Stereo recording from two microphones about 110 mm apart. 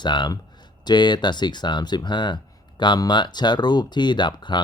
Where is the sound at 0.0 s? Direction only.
45° left (ahead or behind).